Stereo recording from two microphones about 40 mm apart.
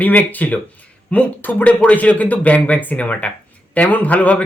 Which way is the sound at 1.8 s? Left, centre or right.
Left.